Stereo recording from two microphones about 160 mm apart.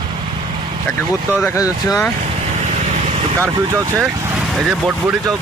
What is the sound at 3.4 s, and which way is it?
Speech, 20° right (ahead or behind).